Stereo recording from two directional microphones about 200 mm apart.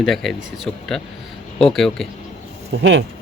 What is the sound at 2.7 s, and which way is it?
Speech, 65° right (ahead or behind).